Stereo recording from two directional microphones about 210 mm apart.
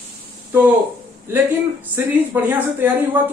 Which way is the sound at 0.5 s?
10° right (ahead or behind).